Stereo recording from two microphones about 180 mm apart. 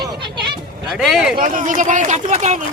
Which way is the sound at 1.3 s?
45° right (ahead or behind).